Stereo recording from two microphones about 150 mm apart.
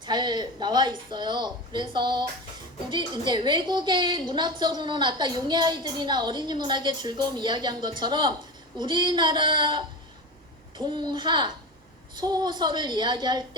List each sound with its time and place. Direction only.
0.0 s a woman's voice: 30° right (ahead or behind)